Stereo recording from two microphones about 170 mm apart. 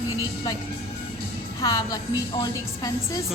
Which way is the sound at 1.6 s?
20° left (ahead or behind).